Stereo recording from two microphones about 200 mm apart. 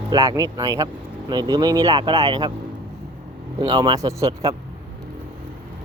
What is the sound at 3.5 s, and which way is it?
Speech, 20° right (ahead or behind).